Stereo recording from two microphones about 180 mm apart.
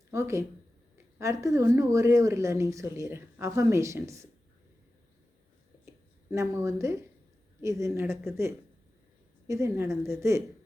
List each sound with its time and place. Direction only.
0.1 s speech: 15° right (ahead or behind)
6.3 s speech: 15° right (ahead or behind)